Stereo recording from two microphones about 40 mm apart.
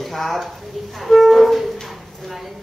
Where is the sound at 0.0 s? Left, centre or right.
Centre.